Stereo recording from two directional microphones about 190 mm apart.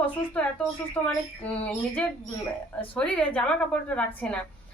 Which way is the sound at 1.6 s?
5° left (ahead or behind).